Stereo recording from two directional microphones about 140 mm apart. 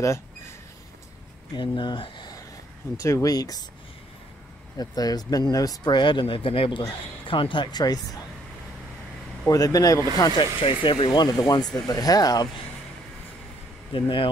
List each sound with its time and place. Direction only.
1.5 s speech: 35° left (ahead or behind)
4.7 s speech: 30° left (ahead or behind)
9.5 s speech: 25° left (ahead or behind)
13.9 s speech: 35° left (ahead or behind)